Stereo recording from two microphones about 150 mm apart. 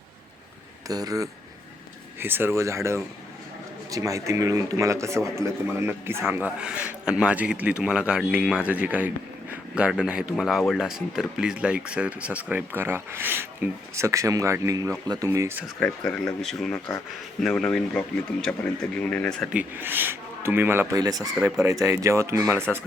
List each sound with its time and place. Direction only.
0.9 s speech: 25° right (ahead or behind)
15.8 s speech: 10° left (ahead or behind)
19.5 s speech: 10° right (ahead or behind)
21.3 s speech: 5° right (ahead or behind)
21.6 s speech: 20° right (ahead or behind)